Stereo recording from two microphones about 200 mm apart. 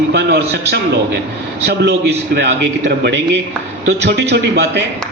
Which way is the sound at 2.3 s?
60° right (ahead or behind).